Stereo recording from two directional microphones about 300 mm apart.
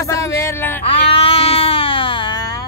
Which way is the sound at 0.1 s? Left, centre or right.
Centre.